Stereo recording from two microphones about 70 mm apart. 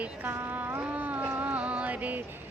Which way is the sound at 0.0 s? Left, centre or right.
Right.